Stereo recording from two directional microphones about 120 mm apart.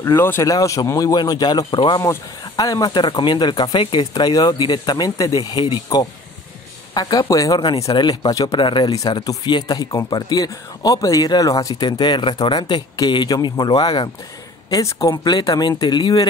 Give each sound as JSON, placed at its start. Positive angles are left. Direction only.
{"t": 0.0, "sound": "speech", "side_deg": 20}
{"t": 4.1, "sound": "speech", "side_deg": 30}
{"t": 14.7, "sound": "speech", "side_deg": 25}